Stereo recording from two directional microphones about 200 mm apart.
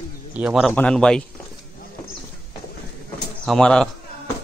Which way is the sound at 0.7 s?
5° left (ahead or behind).